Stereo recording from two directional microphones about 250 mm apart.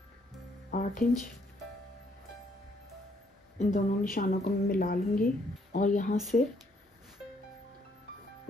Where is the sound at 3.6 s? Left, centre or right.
Left.